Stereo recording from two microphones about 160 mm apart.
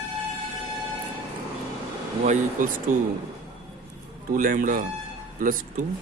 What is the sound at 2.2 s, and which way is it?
Speech, 55° right (ahead or behind).